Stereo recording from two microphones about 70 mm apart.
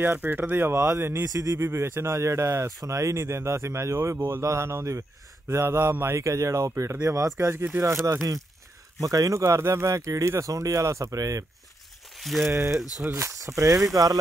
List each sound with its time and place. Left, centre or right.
0.0 s speech: right
0.7 s speech: right
9.4 s speech: right
12.2 s speech: centre
12.4 s speech: right